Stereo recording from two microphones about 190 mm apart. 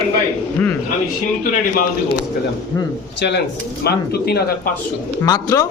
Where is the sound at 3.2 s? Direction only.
65° left (ahead or behind).